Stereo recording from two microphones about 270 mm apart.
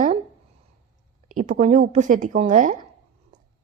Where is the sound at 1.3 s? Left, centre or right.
Right.